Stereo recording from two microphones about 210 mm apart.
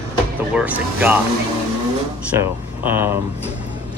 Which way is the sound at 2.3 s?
10° right (ahead or behind).